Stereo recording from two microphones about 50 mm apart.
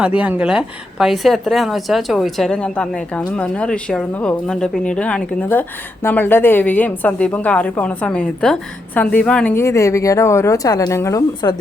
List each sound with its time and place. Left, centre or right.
0.0 s speech: right
0.4 s a woman's voice: centre
2.5 s a woman's voice: left
5.5 s a woman's voice: left; by 8.5 s centre
9.0 s a woman's voice: left
9.6 s speech: left